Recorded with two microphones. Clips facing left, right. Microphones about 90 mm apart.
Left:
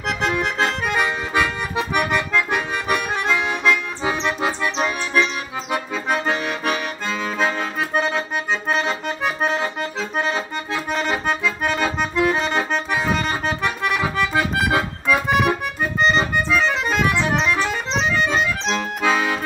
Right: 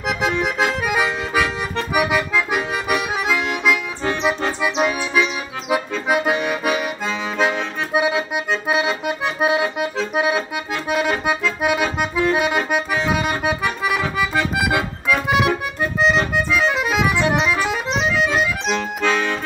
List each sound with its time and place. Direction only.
0.2 s accordion: 5° right (ahead or behind)
4.6 s accordion: 10° right (ahead or behind)